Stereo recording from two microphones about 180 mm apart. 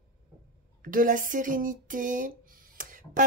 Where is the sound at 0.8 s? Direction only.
50° right (ahead or behind).